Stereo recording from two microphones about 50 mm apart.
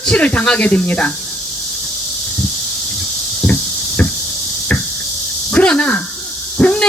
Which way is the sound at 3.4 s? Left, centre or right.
Left.